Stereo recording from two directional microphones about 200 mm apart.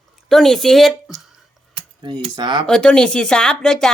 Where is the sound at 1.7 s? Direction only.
20° right (ahead or behind).